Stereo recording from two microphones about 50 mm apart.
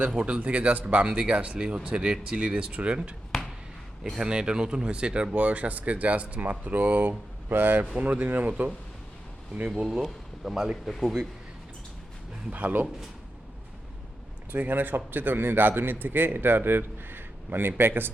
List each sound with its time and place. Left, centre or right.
0.2 s speech: right
4.2 s speech: centre; by 7.9 s right
7.9 s speech: right
10.0 s speech: centre
12.5 s speech: right
14.7 s a man's voice: right